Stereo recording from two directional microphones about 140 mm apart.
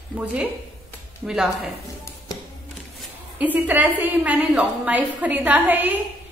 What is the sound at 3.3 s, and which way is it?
A woman's voice, 10° right (ahead or behind).